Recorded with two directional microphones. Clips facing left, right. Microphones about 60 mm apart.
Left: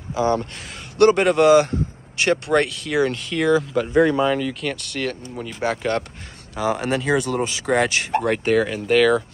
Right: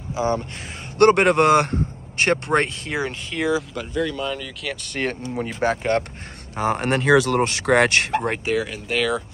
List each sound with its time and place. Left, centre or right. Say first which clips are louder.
0.1 s speech: left 2 dB; centre
0.9 s a man's voice: even; right
3.0 s speech: left 5 dB; centre
3.9 s speech: left 8 dB; left
4.2 s speech: left 8 dB; centre
4.9 s speech: right 2 dB; right
6.5 s speech: even; right
7.2 s speech: right 4 dB; right
8.5 s speech: left 5 dB; centre